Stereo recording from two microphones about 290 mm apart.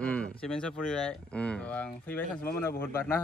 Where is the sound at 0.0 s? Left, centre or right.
Centre.